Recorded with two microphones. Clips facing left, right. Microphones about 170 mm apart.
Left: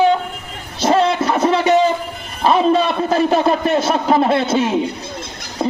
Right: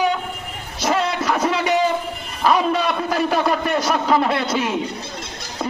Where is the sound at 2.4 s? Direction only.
25° left (ahead or behind).